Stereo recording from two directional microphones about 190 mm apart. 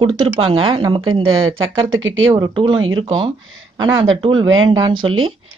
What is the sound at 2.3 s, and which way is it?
Speech, 20° right (ahead or behind).